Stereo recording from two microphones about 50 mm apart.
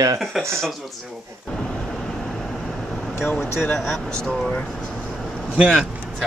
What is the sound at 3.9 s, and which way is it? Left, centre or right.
Speech, centre.